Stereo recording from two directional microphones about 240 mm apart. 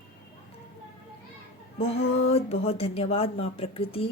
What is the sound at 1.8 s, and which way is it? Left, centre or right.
Speech, left.